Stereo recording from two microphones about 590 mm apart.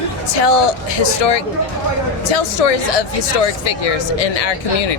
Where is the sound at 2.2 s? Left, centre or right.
Left.